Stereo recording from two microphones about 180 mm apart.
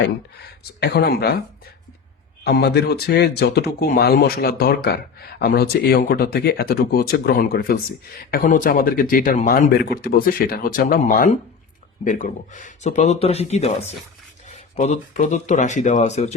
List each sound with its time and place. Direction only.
0.8 s speech: 65° left (ahead or behind)
2.4 s speech: 65° left (ahead or behind); by 16.3 s 40° left (ahead or behind)